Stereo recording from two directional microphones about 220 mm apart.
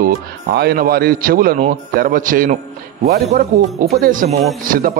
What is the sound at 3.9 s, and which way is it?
A man's voice, 40° right (ahead or behind).